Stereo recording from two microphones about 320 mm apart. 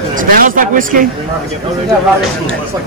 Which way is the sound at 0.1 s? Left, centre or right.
Right.